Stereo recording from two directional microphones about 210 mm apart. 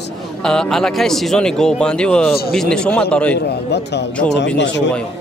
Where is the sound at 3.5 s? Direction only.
55° left (ahead or behind).